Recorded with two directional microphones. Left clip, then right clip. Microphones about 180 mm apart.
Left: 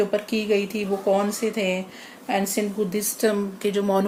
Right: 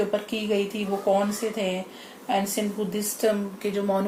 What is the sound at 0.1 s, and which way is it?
Speech, 50° left (ahead or behind).